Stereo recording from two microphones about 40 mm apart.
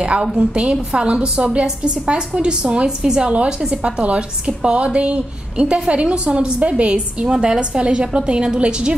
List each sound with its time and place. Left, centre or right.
0.6 s a woman's voice: right
3.0 s a woman's voice: centre
3.7 s a woman's voice: right